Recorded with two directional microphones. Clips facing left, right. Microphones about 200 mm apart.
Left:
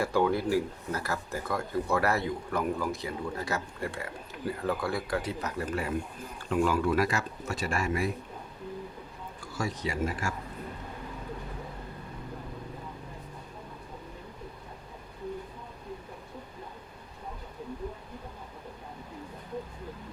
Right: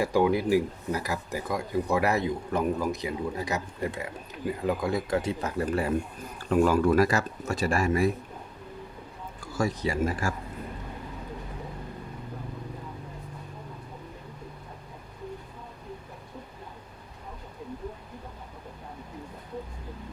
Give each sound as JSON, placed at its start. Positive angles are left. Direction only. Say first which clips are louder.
{"t": 0.0, "sound": "speech", "louder": "right 3 dB", "side_deg": -15}
{"t": 6.5, "sound": "speech", "louder": "right 5 dB", "side_deg": -45}
{"t": 9.6, "sound": "speech", "louder": "right 5 dB", "side_deg": -35}